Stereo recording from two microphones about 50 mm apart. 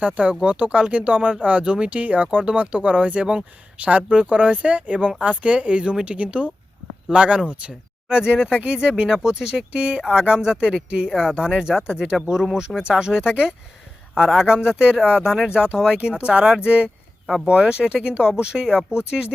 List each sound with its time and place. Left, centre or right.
0.0 s speech: right